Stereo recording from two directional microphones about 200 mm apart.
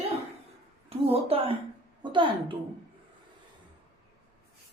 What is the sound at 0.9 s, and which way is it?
A woman's voice, 30° right (ahead or behind).